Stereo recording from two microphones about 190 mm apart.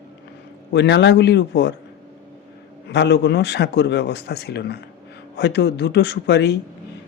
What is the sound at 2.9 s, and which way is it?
Speech, 65° left (ahead or behind).